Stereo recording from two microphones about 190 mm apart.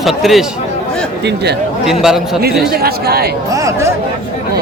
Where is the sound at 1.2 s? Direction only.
60° right (ahead or behind).